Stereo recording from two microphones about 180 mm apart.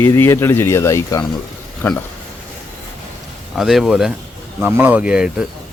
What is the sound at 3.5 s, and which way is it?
Speech, centre (ahead or behind).